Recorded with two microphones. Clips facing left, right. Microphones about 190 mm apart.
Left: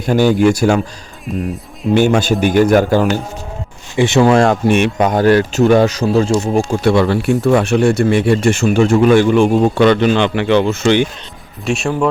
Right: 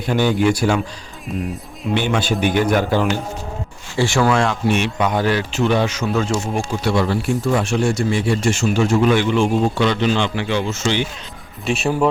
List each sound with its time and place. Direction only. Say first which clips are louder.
0.3 s speech: left 5 dB; 45° left (ahead or behind)
1.9 s speech: left 7 dB; 45° left (ahead or behind)
3.9 s speech: left 6 dB; 20° left (ahead or behind)
4.3 s speech: left 6 dB; 45° left (ahead or behind)
6.7 s speech: left 4 dB; 60° left (ahead or behind)
11.6 s speech: left 2 dB; centre (ahead or behind)